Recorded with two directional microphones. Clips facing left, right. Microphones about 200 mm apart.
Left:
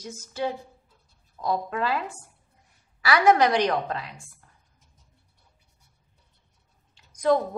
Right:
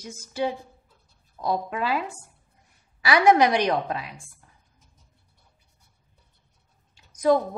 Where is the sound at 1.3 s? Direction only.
10° right (ahead or behind).